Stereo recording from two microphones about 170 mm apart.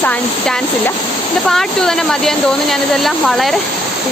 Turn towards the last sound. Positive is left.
turn(degrees=0)  # may be behind; listen again after turning